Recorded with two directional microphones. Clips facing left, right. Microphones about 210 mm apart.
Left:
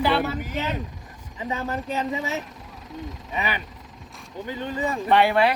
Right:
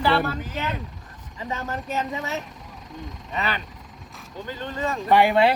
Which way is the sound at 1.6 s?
15° left (ahead or behind).